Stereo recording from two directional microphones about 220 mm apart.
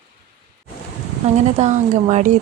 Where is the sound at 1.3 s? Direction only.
30° right (ahead or behind).